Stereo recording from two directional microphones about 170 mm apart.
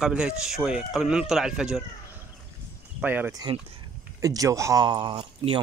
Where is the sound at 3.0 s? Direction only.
10° right (ahead or behind).